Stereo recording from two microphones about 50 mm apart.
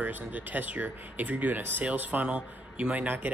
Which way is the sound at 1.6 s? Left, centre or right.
Right.